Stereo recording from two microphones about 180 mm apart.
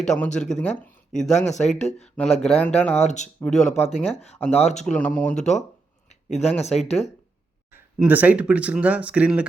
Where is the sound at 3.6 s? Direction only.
35° left (ahead or behind).